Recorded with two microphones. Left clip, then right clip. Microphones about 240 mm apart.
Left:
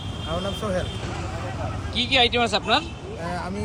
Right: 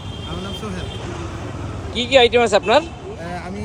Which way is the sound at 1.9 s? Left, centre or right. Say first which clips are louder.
Right 6 dB; centre.